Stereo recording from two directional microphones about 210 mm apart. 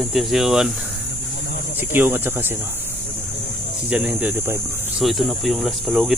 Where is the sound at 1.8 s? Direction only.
10° right (ahead or behind).